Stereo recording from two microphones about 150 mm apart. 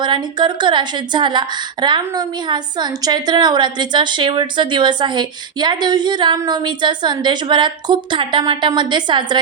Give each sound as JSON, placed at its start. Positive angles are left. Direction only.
{"t": 0.0, "sound": "a woman's voice", "side_deg": -30}